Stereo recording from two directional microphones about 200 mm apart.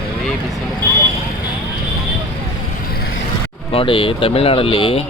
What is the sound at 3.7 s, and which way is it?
Speech, 25° left (ahead or behind).